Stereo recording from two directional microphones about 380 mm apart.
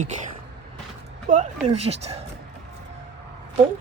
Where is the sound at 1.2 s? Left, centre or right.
Centre.